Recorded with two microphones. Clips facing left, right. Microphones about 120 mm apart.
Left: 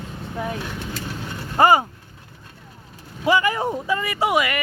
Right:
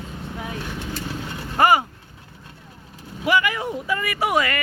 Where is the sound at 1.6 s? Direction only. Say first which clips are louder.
Left 2 dB; 25° left (ahead or behind).